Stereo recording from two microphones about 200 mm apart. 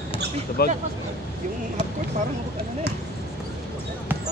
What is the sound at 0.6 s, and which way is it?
Speech, 50° left (ahead or behind).